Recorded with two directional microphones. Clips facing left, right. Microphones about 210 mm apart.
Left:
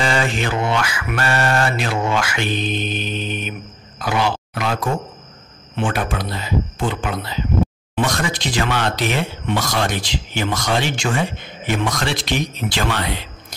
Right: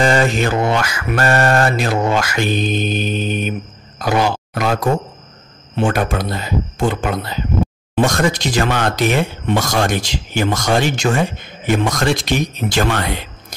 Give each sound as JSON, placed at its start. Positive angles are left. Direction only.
{"t": 0.0, "sound": "speech", "side_deg": -40}